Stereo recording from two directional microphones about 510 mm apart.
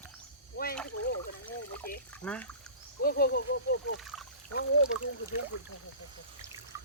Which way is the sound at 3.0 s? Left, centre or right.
Centre.